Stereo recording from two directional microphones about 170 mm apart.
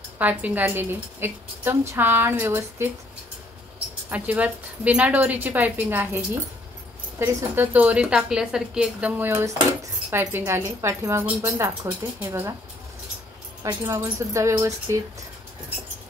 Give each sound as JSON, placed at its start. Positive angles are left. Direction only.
{"t": 0.2, "sound": "a woman's voice", "side_deg": -10}
{"t": 4.1, "sound": "a woman's voice", "side_deg": -10}
{"t": 13.6, "sound": "a woman's voice", "side_deg": -20}